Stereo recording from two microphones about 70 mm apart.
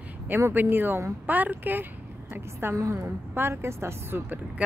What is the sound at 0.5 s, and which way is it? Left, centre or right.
A woman's voice, right.